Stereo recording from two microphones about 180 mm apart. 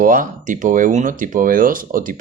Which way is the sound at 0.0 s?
50° right (ahead or behind).